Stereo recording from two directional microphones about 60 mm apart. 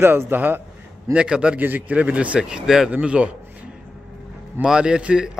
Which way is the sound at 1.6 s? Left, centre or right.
Right.